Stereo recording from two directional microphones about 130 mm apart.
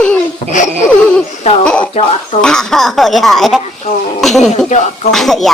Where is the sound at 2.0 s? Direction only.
70° left (ahead or behind).